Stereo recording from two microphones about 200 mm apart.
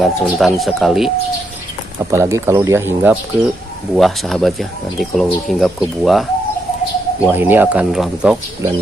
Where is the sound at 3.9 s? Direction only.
Centre (ahead or behind).